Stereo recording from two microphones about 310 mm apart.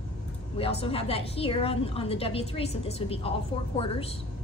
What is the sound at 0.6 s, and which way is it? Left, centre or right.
A woman's voice, centre.